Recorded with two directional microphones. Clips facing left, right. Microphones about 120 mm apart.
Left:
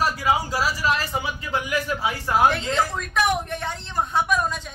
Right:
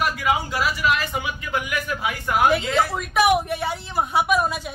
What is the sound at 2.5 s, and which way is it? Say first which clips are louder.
A woman's voice: right 3 dB; 5° right (ahead or behind).